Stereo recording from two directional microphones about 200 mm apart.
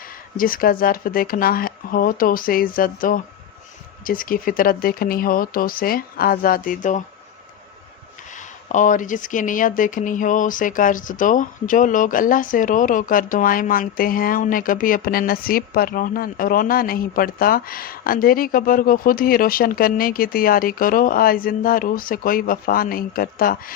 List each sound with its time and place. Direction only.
0.3 s speech: 45° left (ahead or behind)
8.3 s speech: 40° left (ahead or behind)